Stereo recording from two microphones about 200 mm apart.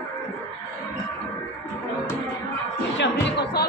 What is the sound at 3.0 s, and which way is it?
Music, 55° left (ahead or behind).